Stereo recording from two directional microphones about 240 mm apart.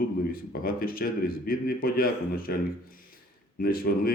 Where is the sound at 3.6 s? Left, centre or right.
Left.